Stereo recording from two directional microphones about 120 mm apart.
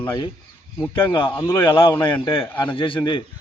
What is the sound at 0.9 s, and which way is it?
A man's voice, 45° left (ahead or behind).